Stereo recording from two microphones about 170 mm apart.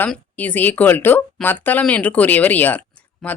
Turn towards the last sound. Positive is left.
turn(degrees=10)  # may be behind; listen again after turning